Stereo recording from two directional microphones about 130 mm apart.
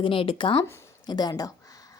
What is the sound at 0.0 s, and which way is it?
A woman's voice, 45° left (ahead or behind).